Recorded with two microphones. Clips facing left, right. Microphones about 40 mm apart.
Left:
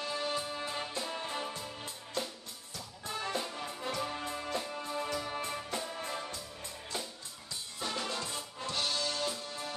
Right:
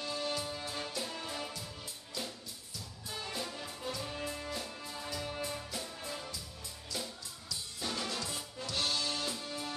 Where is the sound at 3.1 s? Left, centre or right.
Left.